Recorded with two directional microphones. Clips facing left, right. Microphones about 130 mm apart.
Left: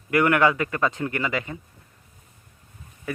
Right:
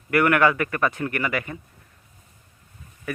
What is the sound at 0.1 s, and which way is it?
Speech, 20° left (ahead or behind).